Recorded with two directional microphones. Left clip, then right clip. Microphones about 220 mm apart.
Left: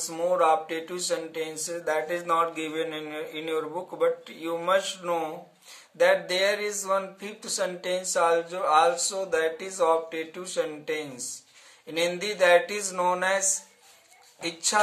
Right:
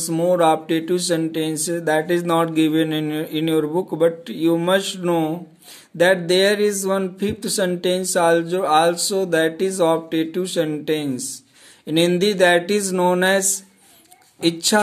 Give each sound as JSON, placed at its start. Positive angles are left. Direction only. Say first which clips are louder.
{"t": 0.0, "sound": "music", "louder": "right 7 dB", "side_deg": -40}
{"t": 5.9, "sound": "speech", "louder": "right 6 dB", "side_deg": -40}
{"t": 14.4, "sound": "music", "louder": "right 9 dB", "side_deg": -45}